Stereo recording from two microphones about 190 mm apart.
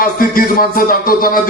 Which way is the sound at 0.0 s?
50° left (ahead or behind).